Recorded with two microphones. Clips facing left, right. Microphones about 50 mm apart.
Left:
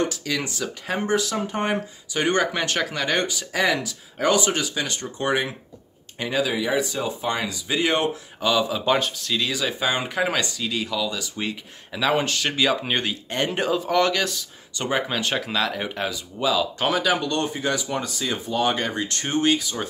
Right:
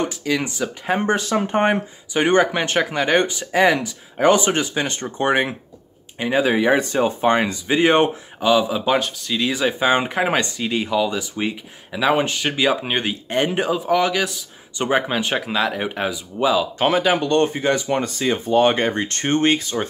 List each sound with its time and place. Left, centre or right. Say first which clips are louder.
0.0 s speech: right 3 dB; right
1.0 s speech: right 1 dB; right
6.1 s speech: right 5 dB; right
6.4 s speech: right 6 dB; right
8.4 s speech: right 5 dB; centre
8.9 s speech: right 2 dB; centre
9.4 s speech: right 7 dB; right
13.5 s speech: right 1 dB; centre
14.8 s speech: right 5 dB; right